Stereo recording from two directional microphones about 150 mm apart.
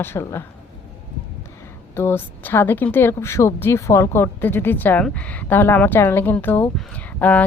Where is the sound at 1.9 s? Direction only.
15° left (ahead or behind).